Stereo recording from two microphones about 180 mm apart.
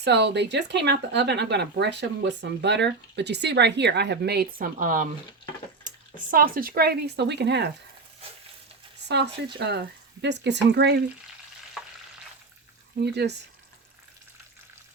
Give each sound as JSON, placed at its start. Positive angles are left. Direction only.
{"t": 0.0, "sound": "speech", "side_deg": -70}
{"t": 5.9, "sound": "a sound", "side_deg": -45}
{"t": 6.3, "sound": "speech", "side_deg": -55}
{"t": 9.0, "sound": "speech", "side_deg": -70}
{"t": 13.0, "sound": "speech", "side_deg": -70}